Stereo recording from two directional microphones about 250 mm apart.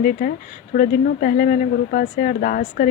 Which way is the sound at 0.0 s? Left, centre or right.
Left.